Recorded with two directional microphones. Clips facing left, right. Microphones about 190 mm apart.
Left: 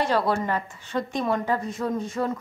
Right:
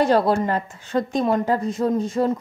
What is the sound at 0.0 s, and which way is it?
Speech, 40° right (ahead or behind).